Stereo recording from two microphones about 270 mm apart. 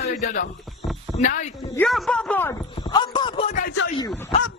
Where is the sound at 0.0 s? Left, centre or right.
Left.